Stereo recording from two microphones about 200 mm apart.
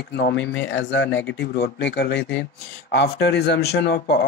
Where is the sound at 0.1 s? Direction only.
55° left (ahead or behind).